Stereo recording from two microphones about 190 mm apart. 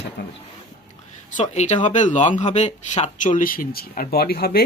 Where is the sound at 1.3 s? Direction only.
40° left (ahead or behind).